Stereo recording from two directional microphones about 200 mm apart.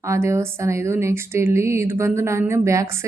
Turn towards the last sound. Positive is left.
turn(degrees=-15)  # may be behind; listen again after turning